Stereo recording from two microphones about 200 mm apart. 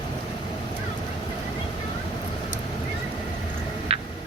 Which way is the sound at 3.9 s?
30° right (ahead or behind).